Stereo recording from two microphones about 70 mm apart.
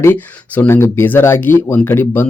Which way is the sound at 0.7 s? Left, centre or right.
Left.